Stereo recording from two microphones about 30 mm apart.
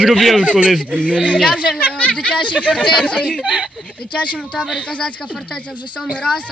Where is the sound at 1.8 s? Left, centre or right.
Left.